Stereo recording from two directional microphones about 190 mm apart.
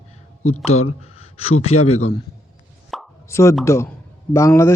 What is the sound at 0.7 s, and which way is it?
Speech, 90° left.